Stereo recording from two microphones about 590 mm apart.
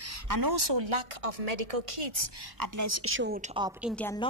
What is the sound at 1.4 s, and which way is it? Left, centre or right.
Speech, right.